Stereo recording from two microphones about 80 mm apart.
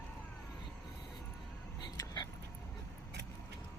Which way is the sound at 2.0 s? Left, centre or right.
Left.